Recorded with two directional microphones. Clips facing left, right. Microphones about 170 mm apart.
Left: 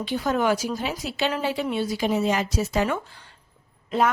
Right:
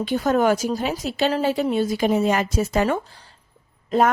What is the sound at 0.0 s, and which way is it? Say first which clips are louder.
A woman's voice: right 4 dB; 50° right (ahead or behind).